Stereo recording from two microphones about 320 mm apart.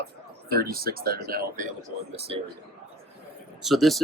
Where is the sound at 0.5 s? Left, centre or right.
Right.